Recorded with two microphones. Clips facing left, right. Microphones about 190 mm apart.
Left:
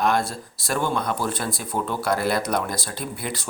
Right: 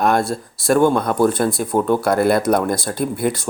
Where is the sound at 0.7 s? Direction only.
50° right (ahead or behind).